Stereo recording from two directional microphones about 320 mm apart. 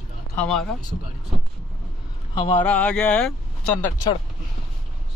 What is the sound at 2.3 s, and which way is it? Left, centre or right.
Speech, centre.